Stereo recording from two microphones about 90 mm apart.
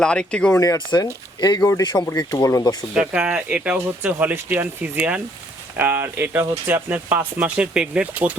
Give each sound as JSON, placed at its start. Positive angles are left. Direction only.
{"t": 0.0, "sound": "speech", "side_deg": 10}
{"t": 0.9, "sound": "speech", "side_deg": 40}
{"t": 2.3, "sound": "speech", "side_deg": 35}
{"t": 2.9, "sound": "speech", "side_deg": -5}